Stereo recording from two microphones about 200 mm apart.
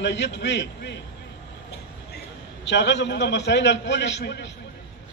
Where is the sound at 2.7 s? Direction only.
60° left (ahead or behind).